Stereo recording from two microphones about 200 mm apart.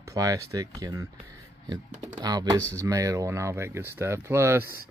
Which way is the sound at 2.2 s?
20° right (ahead or behind).